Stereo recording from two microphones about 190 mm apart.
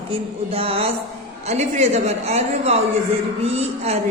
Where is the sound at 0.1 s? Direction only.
30° right (ahead or behind).